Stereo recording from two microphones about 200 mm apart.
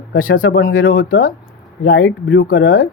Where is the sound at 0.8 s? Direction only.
75° left (ahead or behind).